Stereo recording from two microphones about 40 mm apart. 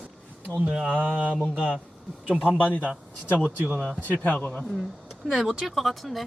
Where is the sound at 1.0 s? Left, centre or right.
Right.